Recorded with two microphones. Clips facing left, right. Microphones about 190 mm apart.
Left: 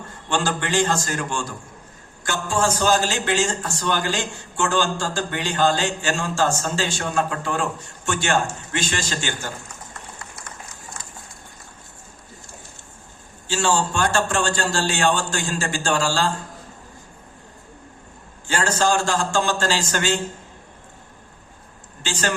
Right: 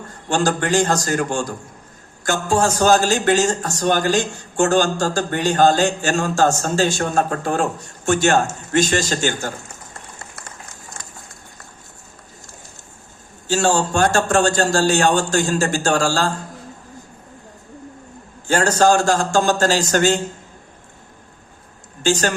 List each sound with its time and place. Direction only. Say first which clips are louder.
0.1 s a man's voice: right 5 dB; 45° right (ahead or behind)
13.5 s a man's voice: right 4 dB; 45° right (ahead or behind)
18.4 s a man's voice: right 6 dB; 45° right (ahead or behind)
22.0 s speech: right 8 dB; 45° right (ahead or behind)